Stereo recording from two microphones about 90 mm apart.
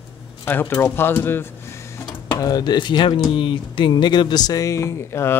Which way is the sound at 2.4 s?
45° left (ahead or behind).